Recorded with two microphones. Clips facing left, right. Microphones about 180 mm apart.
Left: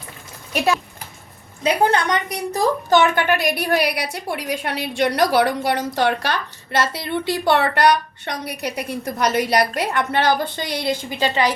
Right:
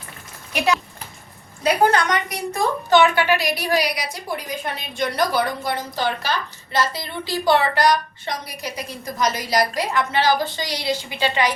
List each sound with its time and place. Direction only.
1.9 s a woman's voice: 30° left (ahead or behind)
2.9 s a woman's voice: 45° left (ahead or behind)